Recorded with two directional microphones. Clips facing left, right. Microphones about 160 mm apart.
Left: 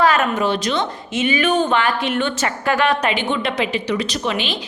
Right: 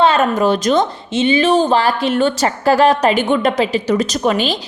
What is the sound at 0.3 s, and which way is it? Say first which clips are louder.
Speech: right 6 dB; 45° right (ahead or behind).